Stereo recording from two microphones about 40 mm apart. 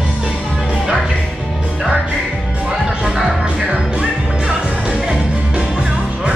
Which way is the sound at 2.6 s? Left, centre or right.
Centre.